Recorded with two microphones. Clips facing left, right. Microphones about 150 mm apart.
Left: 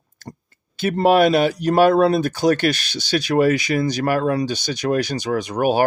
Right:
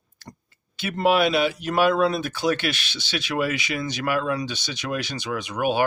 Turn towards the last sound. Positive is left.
turn(degrees=40)  # may be behind; listen again after turning